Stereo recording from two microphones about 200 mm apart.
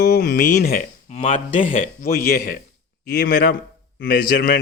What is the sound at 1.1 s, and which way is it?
A man's voice, 35° left (ahead or behind).